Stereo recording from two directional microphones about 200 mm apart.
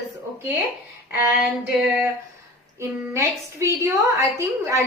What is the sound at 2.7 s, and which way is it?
A woman's voice, 15° right (ahead or behind).